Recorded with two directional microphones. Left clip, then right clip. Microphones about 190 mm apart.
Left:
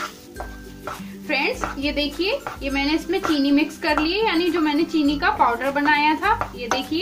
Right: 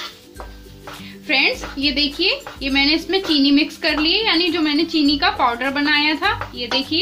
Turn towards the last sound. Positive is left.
turn(degrees=-30)  # may be behind; listen again after turning